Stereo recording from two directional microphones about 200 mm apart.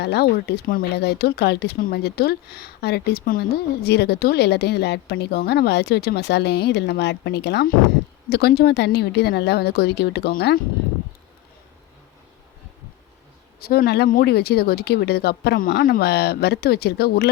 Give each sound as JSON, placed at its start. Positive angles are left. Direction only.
{"t": 0.0, "sound": "a woman's voice", "side_deg": 55}
{"t": 13.6, "sound": "speech", "side_deg": 50}